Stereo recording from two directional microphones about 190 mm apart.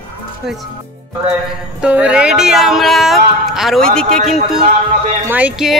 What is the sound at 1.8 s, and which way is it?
Speech, 5° right (ahead or behind).